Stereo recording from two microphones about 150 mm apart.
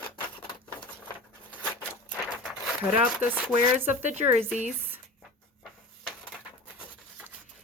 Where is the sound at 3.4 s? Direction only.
10° right (ahead or behind).